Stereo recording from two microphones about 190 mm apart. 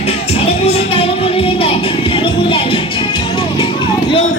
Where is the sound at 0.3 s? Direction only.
35° left (ahead or behind).